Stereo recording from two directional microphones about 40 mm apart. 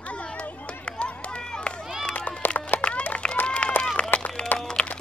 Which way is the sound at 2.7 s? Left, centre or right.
Left.